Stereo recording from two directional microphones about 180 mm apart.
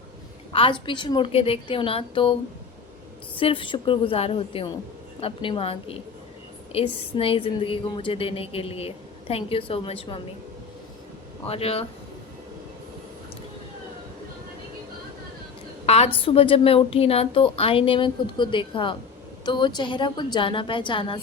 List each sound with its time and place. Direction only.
0.5 s a woman's voice: 30° left (ahead or behind)
3.3 s a woman's voice: 30° left (ahead or behind)
11.4 s a woman's voice: 35° left (ahead or behind)
15.9 s a woman's voice: 35° left (ahead or behind)